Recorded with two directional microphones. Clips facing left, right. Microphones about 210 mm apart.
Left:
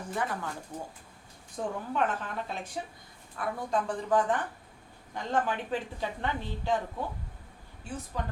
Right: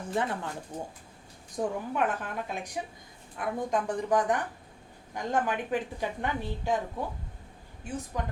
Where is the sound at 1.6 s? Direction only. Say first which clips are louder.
Right 4 dB; 15° right (ahead or behind).